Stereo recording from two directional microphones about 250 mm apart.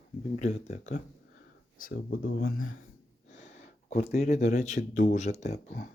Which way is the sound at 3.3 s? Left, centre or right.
Left.